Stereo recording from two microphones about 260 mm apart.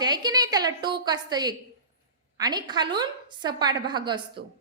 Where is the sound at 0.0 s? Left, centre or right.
Centre.